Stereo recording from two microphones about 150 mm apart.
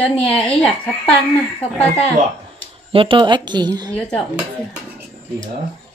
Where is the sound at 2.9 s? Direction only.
35° right (ahead or behind).